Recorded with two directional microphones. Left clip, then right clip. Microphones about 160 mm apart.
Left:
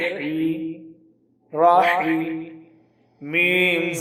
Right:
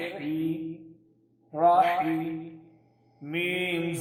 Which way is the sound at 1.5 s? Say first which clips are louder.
Left 6 dB; 20° left (ahead or behind).